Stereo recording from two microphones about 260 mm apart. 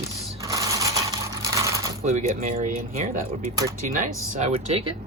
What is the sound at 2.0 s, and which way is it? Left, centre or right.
Coin, right.